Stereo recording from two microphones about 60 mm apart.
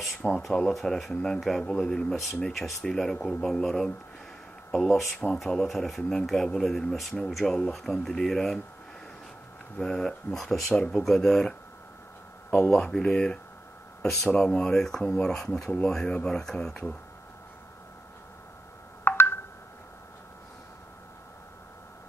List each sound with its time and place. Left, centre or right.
0.3 s speech: centre
9.8 s speech: centre
12.7 s speech: centre
19.1 s telephone dialing: left